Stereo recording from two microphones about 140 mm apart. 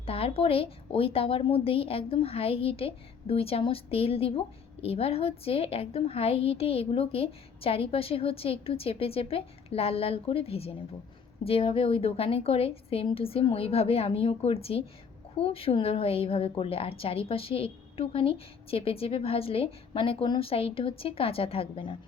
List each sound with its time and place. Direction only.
0.0 s a woman's voice: 45° left (ahead or behind)